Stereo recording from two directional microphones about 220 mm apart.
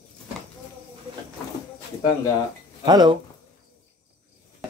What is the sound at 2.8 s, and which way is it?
Speech, 20° right (ahead or behind).